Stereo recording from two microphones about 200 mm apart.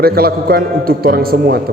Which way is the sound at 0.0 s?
50° right (ahead or behind).